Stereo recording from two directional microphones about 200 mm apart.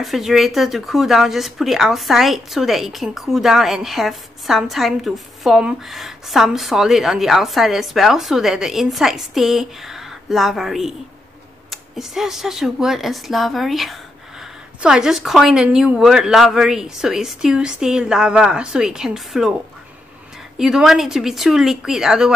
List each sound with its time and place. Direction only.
0.0 s speech: centre (ahead or behind)
20.5 s speech: centre (ahead or behind)